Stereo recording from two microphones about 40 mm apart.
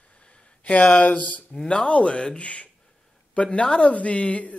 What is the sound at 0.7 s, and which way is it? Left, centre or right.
Speech, left.